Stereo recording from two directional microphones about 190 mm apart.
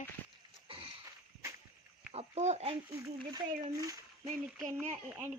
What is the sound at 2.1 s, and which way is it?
Speech, 35° right (ahead or behind).